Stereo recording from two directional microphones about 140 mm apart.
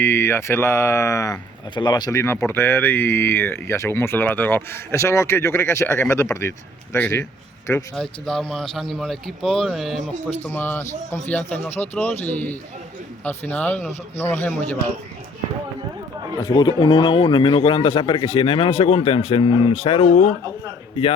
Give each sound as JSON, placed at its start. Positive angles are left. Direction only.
{"t": 0.0, "sound": "speech", "side_deg": 15}
{"t": 1.7, "sound": "speech", "side_deg": 30}
{"t": 7.9, "sound": "a man's voice", "side_deg": 5}
{"t": 10.2, "sound": "speech", "side_deg": 15}
{"t": 16.4, "sound": "speech", "side_deg": 30}